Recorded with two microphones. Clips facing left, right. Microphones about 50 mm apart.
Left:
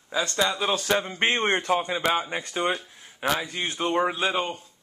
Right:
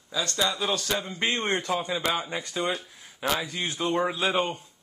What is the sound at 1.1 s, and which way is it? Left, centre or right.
Speech, left.